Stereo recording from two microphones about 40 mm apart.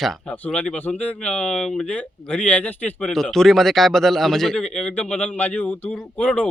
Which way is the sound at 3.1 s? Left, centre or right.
Centre.